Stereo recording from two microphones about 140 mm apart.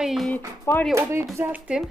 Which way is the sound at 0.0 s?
Centre (ahead or behind).